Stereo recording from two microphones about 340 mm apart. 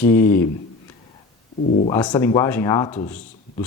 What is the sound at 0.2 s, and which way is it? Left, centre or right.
Speech, centre.